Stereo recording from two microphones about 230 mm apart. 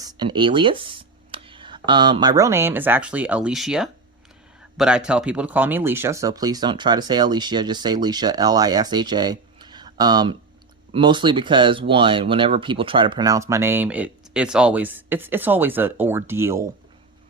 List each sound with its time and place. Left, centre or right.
0.0 s speech: centre